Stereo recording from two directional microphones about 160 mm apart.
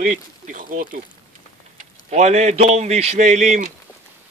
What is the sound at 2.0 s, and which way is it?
Speech, 45° right (ahead or behind).